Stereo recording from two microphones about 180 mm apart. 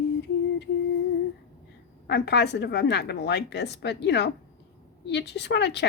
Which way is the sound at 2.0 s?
70° left (ahead or behind).